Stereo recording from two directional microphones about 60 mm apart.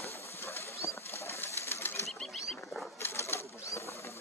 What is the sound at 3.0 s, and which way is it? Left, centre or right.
Sewing machine, left.